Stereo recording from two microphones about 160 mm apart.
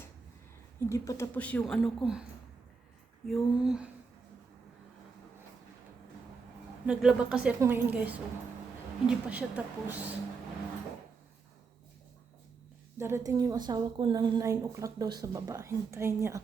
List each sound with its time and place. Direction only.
0.8 s speech: 20° left (ahead or behind); by 2.2 s centre (ahead or behind)
3.2 s a sound: centre (ahead or behind)
6.8 s a woman's voice: 5° right (ahead or behind)
13.0 s a woman's voice: 15° right (ahead or behind)